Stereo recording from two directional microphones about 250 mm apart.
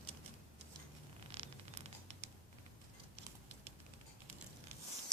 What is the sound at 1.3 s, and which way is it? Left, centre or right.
Zipper, right.